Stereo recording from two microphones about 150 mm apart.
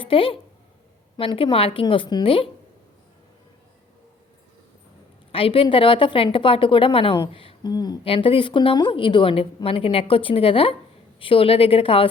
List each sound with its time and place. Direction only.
0.0 s a woman's voice: 35° left (ahead or behind)
5.3 s a woman's voice: 40° left (ahead or behind)
8.0 s a woman's voice: 35° left (ahead or behind)